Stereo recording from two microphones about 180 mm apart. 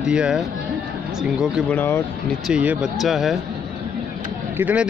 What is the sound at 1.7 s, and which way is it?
Speech, 10° left (ahead or behind).